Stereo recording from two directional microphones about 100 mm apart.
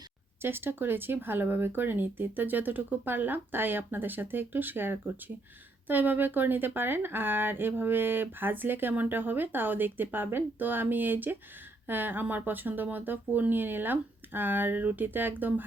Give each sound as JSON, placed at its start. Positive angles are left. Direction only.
{"t": 0.4, "sound": "speech", "side_deg": -20}